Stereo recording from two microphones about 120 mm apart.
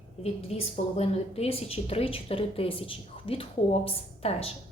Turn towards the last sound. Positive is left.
turn(degrees=55)  # may be behind; listen again after turning